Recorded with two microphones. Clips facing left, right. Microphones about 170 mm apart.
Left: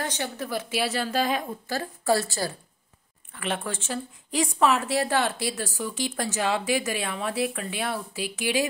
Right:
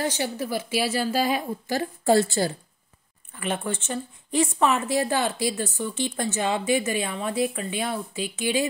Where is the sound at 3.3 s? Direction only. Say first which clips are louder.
Right 2 dB; centre (ahead or behind).